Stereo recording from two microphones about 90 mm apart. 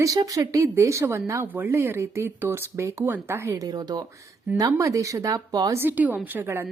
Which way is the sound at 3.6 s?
45° right (ahead or behind).